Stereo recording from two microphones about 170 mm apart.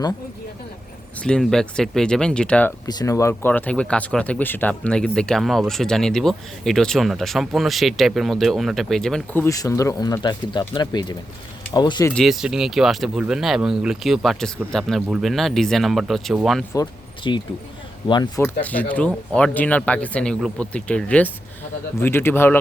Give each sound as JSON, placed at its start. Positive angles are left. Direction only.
{"t": 1.2, "sound": "speech", "side_deg": 5}
{"t": 2.8, "sound": "speech", "side_deg": 20}
{"t": 12.1, "sound": "speech", "side_deg": 0}
{"t": 17.2, "sound": "speech", "side_deg": 25}
{"t": 18.6, "sound": "speech", "side_deg": 10}